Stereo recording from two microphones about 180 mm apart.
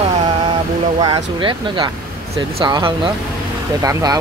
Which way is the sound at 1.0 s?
25° right (ahead or behind).